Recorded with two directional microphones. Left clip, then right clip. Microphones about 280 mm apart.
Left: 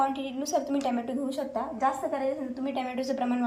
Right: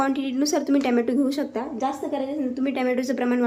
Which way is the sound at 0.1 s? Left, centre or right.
Centre.